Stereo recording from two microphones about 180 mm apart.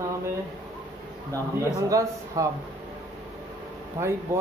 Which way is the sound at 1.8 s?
20° right (ahead or behind).